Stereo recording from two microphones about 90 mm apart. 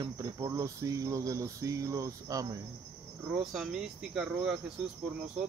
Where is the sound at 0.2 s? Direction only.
35° right (ahead or behind).